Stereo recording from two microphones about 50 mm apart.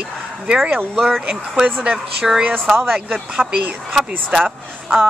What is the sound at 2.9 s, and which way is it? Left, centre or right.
Speech, right.